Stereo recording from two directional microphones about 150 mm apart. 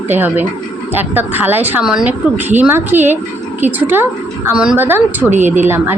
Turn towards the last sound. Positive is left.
turn(degrees=-15)  # may be behind; listen again after turning